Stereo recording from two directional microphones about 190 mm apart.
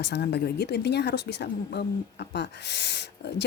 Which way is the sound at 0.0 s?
60° left (ahead or behind).